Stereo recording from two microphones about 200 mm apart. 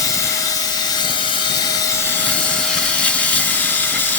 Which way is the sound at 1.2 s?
20° left (ahead or behind).